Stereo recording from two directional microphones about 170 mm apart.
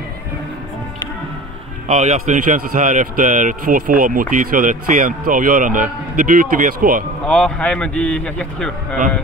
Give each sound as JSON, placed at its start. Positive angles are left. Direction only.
{"t": 1.9, "sound": "a man's voice", "side_deg": -40}
{"t": 7.2, "sound": "a man's voice", "side_deg": 5}